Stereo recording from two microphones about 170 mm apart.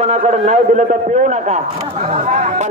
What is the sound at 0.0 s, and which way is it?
A man's voice, 40° right (ahead or behind).